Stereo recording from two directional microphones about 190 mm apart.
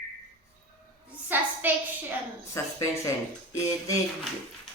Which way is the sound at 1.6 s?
10° right (ahead or behind).